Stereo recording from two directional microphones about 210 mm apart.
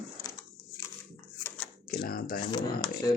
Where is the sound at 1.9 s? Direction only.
45° left (ahead or behind).